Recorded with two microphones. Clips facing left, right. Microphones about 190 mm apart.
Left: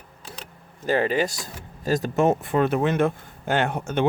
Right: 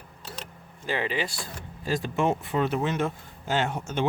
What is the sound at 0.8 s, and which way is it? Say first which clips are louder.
Speech: left 7 dB; 45° left (ahead or behind).